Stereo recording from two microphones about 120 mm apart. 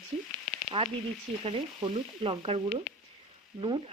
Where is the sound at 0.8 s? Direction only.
45° right (ahead or behind).